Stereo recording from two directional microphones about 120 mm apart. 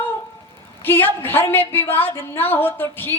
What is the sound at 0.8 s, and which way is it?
Speech, 15° left (ahead or behind).